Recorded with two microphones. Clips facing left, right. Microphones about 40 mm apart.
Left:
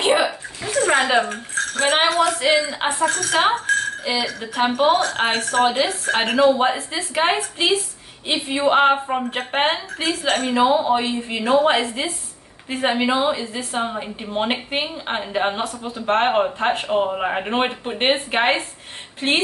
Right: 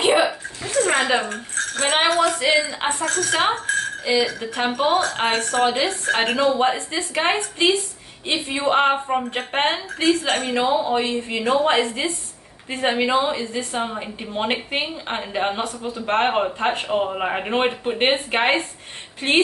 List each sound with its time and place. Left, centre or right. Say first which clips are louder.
0.0 s speech: even; centre
10.6 s a woman's voice: left 4 dB; centre